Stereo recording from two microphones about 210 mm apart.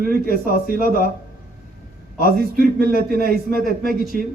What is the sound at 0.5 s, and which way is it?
Speech, 45° left (ahead or behind).